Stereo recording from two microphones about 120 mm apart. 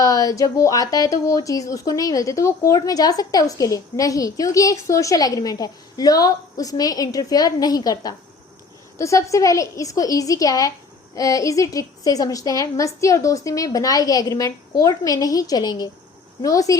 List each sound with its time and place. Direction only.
0.0 s a woman's voice: 30° left (ahead or behind)